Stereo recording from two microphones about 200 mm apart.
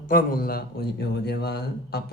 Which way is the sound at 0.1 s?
45° left (ahead or behind).